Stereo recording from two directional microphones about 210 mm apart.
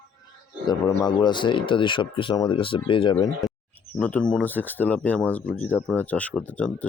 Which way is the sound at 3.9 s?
5° left (ahead or behind).